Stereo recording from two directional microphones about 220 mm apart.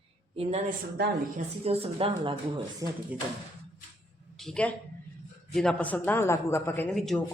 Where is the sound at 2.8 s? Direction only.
15° right (ahead or behind).